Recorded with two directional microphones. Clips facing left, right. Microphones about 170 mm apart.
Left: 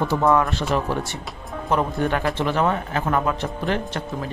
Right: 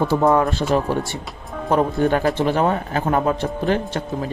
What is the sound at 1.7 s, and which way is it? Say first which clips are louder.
Speech: right 4 dB; 35° right (ahead or behind).